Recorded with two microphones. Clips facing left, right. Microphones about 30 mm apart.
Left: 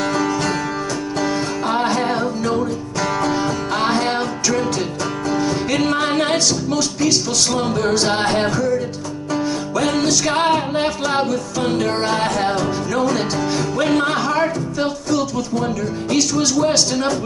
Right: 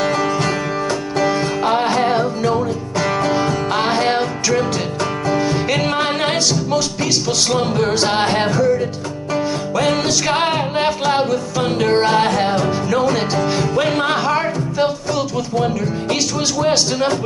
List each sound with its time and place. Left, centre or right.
0.0 s music: centre